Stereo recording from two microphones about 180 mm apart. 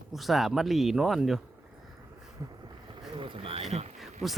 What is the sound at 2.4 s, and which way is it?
Boat, 20° right (ahead or behind).